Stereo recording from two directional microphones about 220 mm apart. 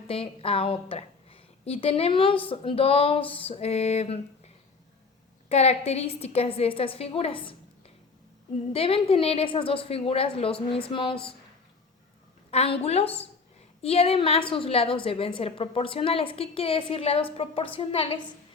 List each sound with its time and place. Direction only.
0.1 s a woman's voice: 25° left (ahead or behind)
5.5 s a woman's voice: 30° left (ahead or behind)
8.7 s a woman's voice: 25° left (ahead or behind)
12.5 s a woman's voice: 25° left (ahead or behind)